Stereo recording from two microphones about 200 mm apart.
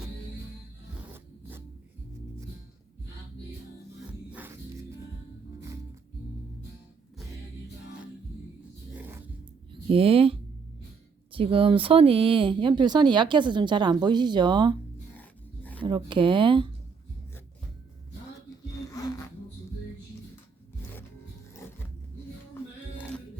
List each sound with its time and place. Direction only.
1.1 s zipper: 10° right (ahead or behind)
4.3 s music: 10° right (ahead or behind)
9.0 s zipper: 10° right (ahead or behind)
9.9 s speech: 30° right (ahead or behind)
15.2 s dog: 10° left (ahead or behind)
16.0 s speech: 25° right (ahead or behind)
18.9 s music: 20° left (ahead or behind)